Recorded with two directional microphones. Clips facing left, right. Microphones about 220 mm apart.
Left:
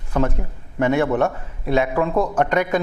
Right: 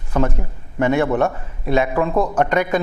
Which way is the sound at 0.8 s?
15° right (ahead or behind).